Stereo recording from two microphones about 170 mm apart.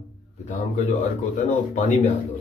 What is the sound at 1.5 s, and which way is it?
Speech, 50° left (ahead or behind).